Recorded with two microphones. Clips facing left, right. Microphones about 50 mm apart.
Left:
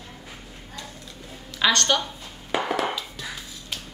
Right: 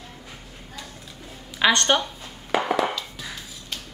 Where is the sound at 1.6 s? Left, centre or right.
Centre.